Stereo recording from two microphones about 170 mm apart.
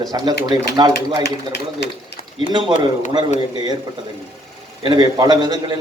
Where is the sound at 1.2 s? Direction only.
85° left.